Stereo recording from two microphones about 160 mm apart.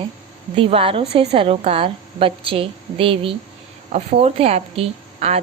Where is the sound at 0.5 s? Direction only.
35° right (ahead or behind).